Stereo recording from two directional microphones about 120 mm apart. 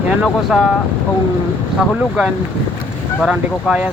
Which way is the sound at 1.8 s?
10° right (ahead or behind).